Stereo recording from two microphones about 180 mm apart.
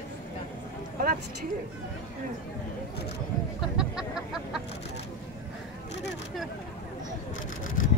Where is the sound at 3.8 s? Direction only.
5° right (ahead or behind).